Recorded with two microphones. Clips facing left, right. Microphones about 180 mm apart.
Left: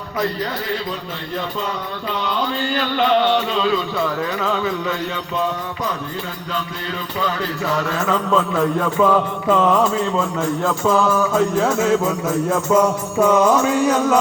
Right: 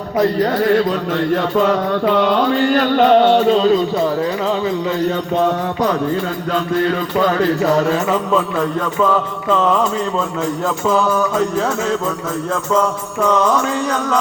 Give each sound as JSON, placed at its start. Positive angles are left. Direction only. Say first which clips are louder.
{"t": 0.2, "sound": "music", "louder": "right 8 dB", "side_deg": -50}
{"t": 1.4, "sound": "music", "louder": "right 10 dB", "side_deg": -85}
{"t": 5.4, "sound": "music", "louder": "right 6 dB", "side_deg": -65}
{"t": 7.2, "sound": "music", "louder": "right 8 dB", "side_deg": -45}
{"t": 8.0, "sound": "a man's voice", "louder": "right 2 dB", "side_deg": -10}
{"t": 8.5, "sound": "music", "louder": "even", "side_deg": 10}
{"t": 10.8, "sound": "music", "louder": "right 1 dB", "side_deg": 5}
{"t": 13.2, "sound": "music", "louder": "left 1 dB", "side_deg": 10}